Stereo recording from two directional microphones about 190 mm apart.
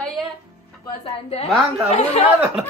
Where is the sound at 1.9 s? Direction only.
35° left (ahead or behind).